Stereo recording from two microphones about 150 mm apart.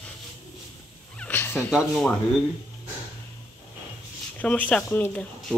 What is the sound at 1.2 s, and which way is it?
Cat, 10° left (ahead or behind).